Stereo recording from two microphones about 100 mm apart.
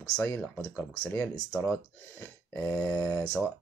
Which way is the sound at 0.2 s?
20° left (ahead or behind).